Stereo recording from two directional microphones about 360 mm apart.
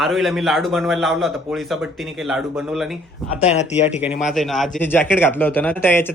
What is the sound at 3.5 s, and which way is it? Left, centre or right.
Speech, centre.